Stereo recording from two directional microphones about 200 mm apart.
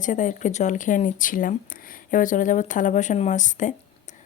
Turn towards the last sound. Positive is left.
turn(degrees=40)  # may be behind; listen again after turning